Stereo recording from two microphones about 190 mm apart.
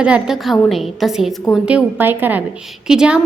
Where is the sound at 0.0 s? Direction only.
5° right (ahead or behind).